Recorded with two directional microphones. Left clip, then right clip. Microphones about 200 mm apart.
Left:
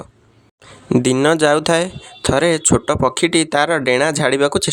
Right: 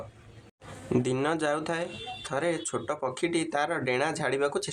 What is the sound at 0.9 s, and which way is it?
Speech, 40° left (ahead or behind).